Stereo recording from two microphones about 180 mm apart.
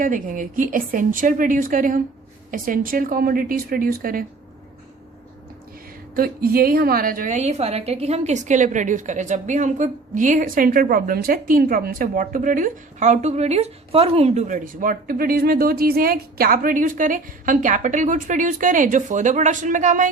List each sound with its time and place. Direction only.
0.0 s a woman's voice: 50° right (ahead or behind)
6.1 s a woman's voice: 55° right (ahead or behind)